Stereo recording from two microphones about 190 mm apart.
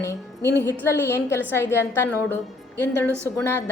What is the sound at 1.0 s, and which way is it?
A woman's voice, 15° left (ahead or behind).